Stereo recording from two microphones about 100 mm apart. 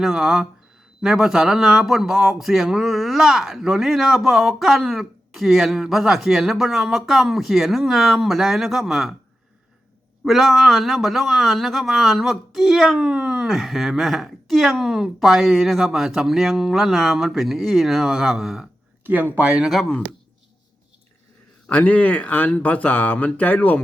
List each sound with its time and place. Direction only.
0.0 s a man's voice: 5° right (ahead or behind)
10.2 s a man's voice: centre (ahead or behind)
19.0 s speech: 20° right (ahead or behind)
19.7 s a man's voice: centre (ahead or behind)
21.7 s speech: 15° left (ahead or behind)